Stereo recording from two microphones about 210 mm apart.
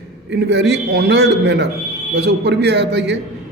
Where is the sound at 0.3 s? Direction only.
50° right (ahead or behind).